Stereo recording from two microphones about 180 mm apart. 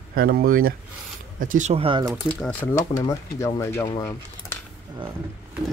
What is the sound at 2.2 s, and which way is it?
Speech, 10° left (ahead or behind).